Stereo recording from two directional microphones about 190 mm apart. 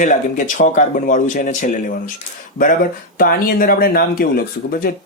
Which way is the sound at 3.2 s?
50° left (ahead or behind).